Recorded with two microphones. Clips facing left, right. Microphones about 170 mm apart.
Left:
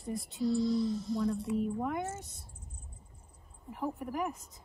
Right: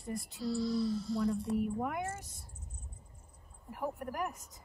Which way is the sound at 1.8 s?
5° right (ahead or behind).